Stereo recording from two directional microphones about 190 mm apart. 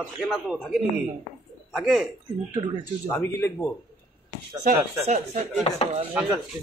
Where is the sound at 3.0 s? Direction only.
10° left (ahead or behind).